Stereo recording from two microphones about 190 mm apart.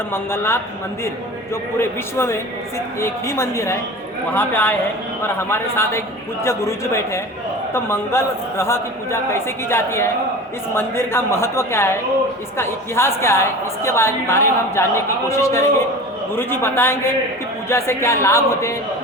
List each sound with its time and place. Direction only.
0.1 s a man's voice: 10° left (ahead or behind)
1.8 s a man's voice: 15° left (ahead or behind)